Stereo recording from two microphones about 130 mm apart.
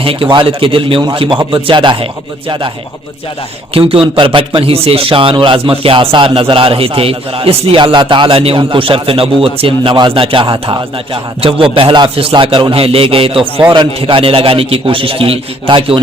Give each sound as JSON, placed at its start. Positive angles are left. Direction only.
{"t": 0.0, "sound": "a man's voice", "side_deg": -45}
{"t": 3.8, "sound": "a man's voice", "side_deg": -45}